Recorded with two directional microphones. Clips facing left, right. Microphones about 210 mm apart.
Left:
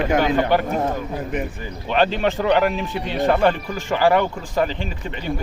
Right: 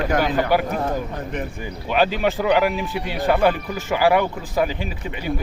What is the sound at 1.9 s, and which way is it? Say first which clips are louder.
Speech: even; 5° right (ahead or behind).